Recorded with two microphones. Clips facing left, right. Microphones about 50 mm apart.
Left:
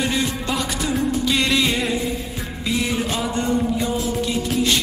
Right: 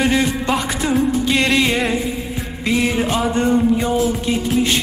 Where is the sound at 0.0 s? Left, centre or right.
Right.